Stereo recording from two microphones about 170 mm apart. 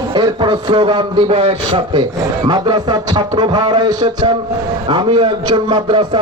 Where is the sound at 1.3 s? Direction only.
40° right (ahead or behind).